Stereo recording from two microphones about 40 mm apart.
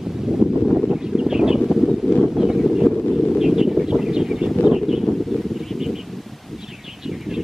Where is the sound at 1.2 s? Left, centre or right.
Centre.